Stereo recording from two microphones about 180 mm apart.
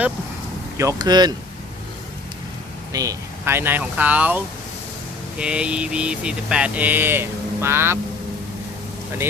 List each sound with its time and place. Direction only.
0.8 s speech: 20° right (ahead or behind)
2.9 s speech: 20° right (ahead or behind)